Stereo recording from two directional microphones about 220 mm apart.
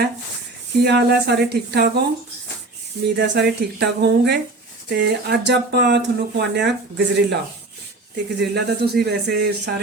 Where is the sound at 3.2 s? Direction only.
50° right (ahead or behind).